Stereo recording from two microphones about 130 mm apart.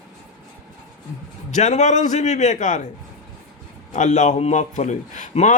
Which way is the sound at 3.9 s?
65° left (ahead or behind).